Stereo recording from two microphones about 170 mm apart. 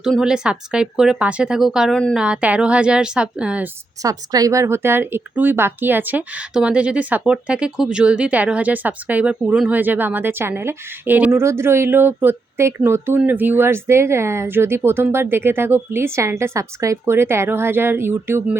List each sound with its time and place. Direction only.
0.0 s speech: centre (ahead or behind)
4.0 s speech: 20° right (ahead or behind)